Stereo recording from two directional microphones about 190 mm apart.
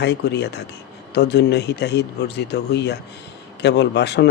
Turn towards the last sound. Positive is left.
turn(degrees=65)  # may be behind; listen again after turning